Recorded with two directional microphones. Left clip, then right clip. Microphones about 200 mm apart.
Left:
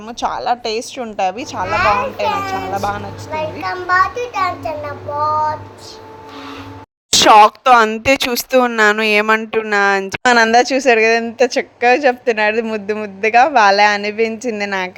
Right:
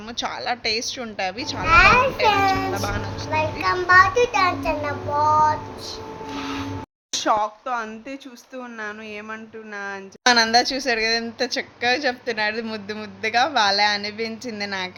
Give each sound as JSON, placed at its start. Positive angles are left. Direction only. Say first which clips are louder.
{"t": 0.2, "sound": "a woman's voice", "louder": "left 8 dB", "side_deg": 25}
{"t": 1.6, "sound": "a child's voice", "louder": "right 1 dB", "side_deg": -30}
{"t": 7.1, "sound": "speech", "louder": "left 14 dB", "side_deg": 55}